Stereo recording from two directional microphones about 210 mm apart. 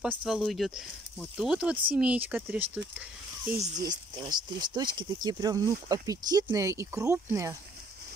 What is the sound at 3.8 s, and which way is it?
Speech, 20° right (ahead or behind).